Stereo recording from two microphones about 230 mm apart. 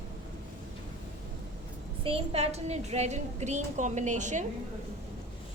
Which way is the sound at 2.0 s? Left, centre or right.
Right.